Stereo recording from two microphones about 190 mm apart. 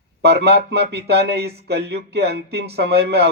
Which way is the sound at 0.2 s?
60° right (ahead or behind).